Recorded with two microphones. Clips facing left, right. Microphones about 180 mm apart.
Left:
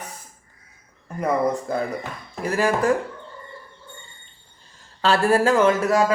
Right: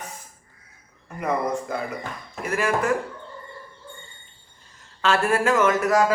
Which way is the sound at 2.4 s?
35° left (ahead or behind).